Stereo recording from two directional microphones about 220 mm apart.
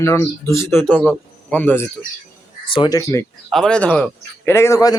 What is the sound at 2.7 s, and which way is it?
Speech, 20° left (ahead or behind).